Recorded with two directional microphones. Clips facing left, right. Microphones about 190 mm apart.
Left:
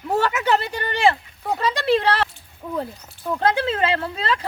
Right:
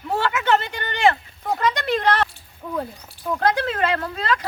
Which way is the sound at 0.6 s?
35° left (ahead or behind).